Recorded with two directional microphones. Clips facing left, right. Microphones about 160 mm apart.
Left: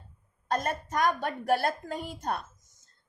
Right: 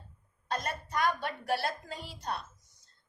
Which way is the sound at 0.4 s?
50° left (ahead or behind).